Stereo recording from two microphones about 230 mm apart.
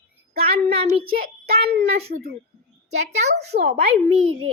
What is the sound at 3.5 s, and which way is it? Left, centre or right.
Child singing, right.